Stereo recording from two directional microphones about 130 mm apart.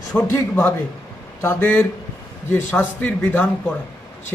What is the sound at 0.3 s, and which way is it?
A man's voice, 15° left (ahead or behind).